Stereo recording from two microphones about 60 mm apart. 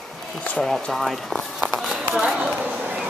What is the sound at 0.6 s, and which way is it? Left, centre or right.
Speech, centre.